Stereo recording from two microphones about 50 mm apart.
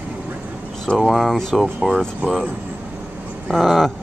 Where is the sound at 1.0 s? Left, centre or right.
Centre.